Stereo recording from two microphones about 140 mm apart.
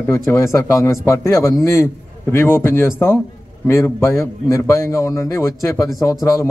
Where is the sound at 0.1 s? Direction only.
20° left (ahead or behind).